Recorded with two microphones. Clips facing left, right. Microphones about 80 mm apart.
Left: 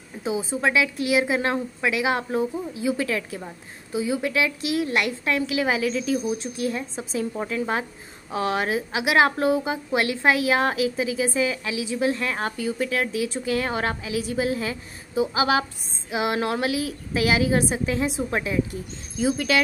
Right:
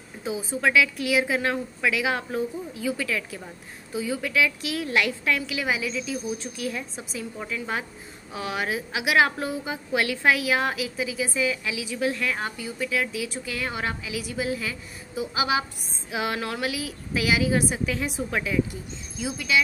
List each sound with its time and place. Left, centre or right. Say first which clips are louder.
0.2 s a woman's voice: left 2 dB; left
3.9 s a woman's voice: left 3 dB; left
6.3 s a woman's voice: left 4 dB; left
16.1 s a woman's voice: left 3 dB; left
16.3 s a woman's voice: left 5 dB; left
19.1 s speech: left 4 dB; left